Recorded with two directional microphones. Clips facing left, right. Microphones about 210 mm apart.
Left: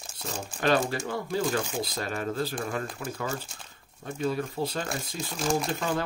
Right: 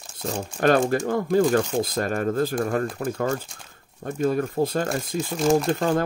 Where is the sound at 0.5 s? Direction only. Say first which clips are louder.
Right 6 dB; 50° right (ahead or behind).